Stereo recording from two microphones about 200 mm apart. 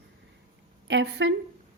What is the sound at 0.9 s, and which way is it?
Speech, 65° right (ahead or behind).